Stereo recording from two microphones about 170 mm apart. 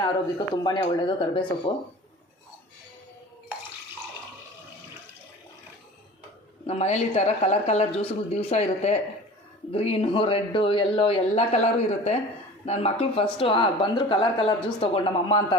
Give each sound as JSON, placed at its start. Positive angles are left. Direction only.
{"t": 0.0, "sound": "speech", "side_deg": 25}
{"t": 6.7, "sound": "speech", "side_deg": 40}